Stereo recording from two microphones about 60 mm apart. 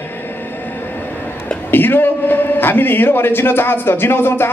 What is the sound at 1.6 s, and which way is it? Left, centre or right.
A man's voice, left.